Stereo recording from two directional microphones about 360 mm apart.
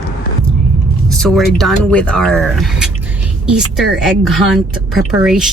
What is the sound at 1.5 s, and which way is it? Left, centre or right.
A woman's voice, centre.